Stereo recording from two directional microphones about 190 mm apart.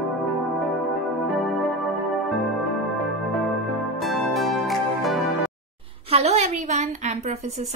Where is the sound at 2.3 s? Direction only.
Centre (ahead or behind).